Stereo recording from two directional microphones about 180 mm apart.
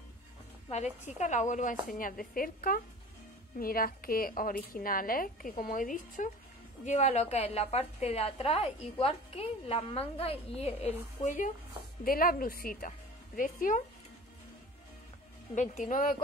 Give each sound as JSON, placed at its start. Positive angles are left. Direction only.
{"t": 1.0, "sound": "a woman's voice", "side_deg": 40}
{"t": 15.5, "sound": "speech", "side_deg": 45}